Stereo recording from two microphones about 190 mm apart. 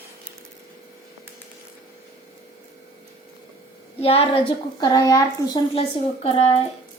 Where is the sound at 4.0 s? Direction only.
30° left (ahead or behind).